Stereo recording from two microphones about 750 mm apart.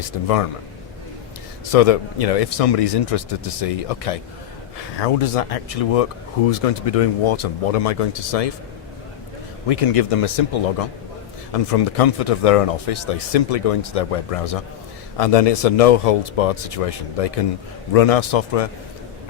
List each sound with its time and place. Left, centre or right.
1.7 s speech: left
9.6 s speech: left